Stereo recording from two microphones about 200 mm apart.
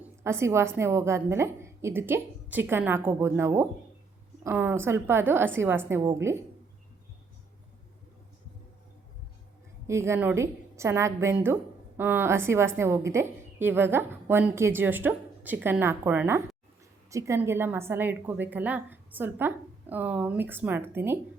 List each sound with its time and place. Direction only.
0.2 s a woman's voice: 15° right (ahead or behind)
9.8 s a woman's voice: 15° right (ahead or behind)